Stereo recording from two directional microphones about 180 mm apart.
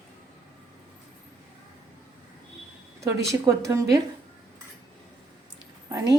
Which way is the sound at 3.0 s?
15° right (ahead or behind).